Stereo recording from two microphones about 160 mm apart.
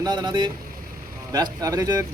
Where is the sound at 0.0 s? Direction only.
25° right (ahead or behind).